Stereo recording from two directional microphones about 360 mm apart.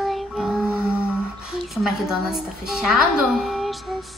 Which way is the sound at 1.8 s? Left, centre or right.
Centre.